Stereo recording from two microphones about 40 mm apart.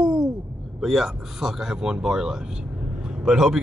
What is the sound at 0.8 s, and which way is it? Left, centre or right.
Speech, centre.